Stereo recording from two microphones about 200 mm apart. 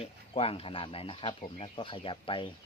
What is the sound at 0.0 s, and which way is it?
Speech, 30° left (ahead or behind).